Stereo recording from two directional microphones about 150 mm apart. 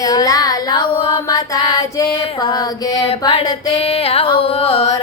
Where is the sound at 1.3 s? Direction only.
25° left (ahead or behind).